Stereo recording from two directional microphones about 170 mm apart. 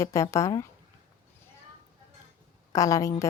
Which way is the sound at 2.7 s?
20° left (ahead or behind).